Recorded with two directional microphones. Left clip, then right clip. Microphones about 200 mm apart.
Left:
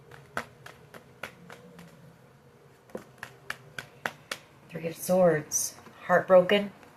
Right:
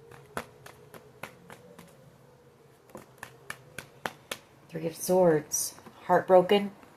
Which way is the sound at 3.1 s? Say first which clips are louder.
Left 1 dB; 20° right (ahead or behind).